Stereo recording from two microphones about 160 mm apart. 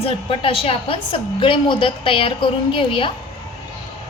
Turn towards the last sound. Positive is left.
turn(degrees=35)  # may be behind; listen again after turning